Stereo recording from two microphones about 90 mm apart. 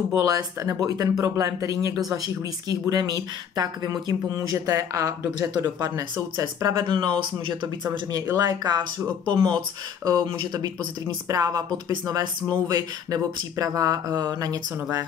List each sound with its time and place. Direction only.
0.1 s speech: 45° right (ahead or behind)
6.8 s speech: 60° right (ahead or behind)
8.5 s speech: 50° right (ahead or behind)